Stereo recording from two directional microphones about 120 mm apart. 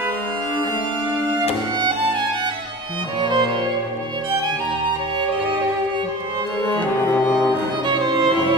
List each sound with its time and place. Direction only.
3.2 s music: 40° right (ahead or behind)
7.8 s music: 35° right (ahead or behind)